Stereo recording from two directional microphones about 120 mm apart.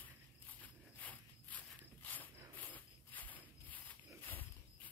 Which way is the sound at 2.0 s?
15° left (ahead or behind).